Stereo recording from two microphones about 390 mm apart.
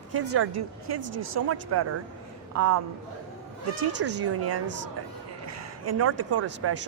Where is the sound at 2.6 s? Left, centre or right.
Right.